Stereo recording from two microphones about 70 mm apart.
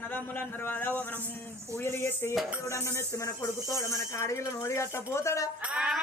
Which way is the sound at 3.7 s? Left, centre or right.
Left.